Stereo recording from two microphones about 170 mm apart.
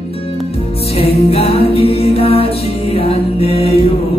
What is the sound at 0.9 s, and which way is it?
Music, 35° left (ahead or behind).